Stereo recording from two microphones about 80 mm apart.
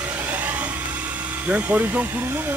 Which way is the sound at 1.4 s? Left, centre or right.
Centre.